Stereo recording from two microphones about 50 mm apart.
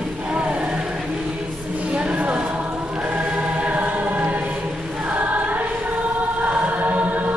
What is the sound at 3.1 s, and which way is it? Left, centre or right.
Choir, right.